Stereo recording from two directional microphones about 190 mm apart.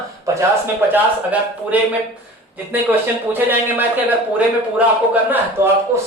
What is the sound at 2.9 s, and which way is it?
Speech, 10° right (ahead or behind).